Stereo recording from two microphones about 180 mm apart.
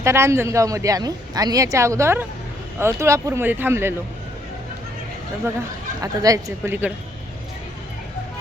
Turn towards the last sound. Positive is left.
turn(degrees=-10)  # may be behind; listen again after turning